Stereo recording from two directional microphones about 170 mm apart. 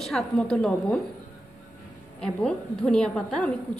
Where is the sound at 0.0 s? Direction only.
Centre (ahead or behind).